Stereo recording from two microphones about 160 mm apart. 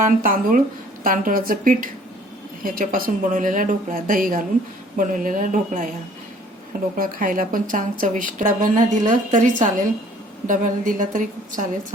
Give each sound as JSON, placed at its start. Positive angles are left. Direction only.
{"t": 0.0, "sound": "a woman's voice", "side_deg": -60}
{"t": 6.9, "sound": "a woman's voice", "side_deg": -60}